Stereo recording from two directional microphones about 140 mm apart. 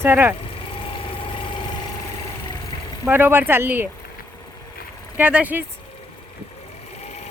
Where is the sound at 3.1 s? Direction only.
15° right (ahead or behind).